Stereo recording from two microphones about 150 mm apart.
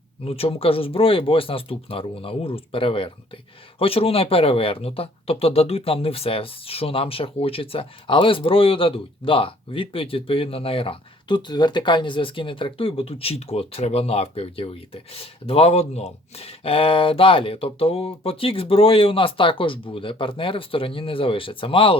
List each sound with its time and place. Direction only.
0.3 s speech: 40° left (ahead or behind)